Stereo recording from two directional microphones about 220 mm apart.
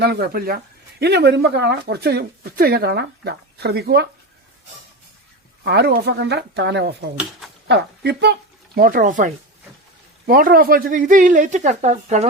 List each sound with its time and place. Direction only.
0.0 s speech: 45° right (ahead or behind)
5.6 s speech: 45° right (ahead or behind); by 12.3 s 30° right (ahead or behind)